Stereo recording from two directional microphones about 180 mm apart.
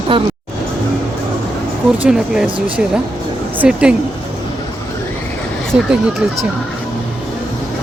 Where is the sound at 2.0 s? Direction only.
5° right (ahead or behind).